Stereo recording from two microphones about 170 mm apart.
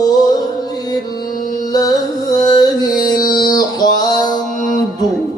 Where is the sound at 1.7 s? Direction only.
20° left (ahead or behind).